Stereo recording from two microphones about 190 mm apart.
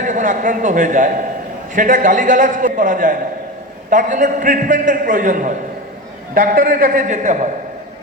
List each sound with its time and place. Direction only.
0.0 s a man's voice: 45° right (ahead or behind)